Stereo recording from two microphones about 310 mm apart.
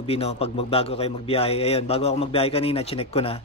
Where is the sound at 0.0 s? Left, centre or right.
Centre.